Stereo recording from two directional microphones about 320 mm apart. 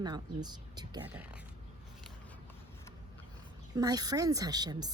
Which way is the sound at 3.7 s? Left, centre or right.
Centre.